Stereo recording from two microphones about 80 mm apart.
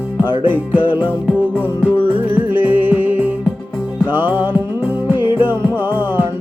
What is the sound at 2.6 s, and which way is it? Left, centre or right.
Music, right.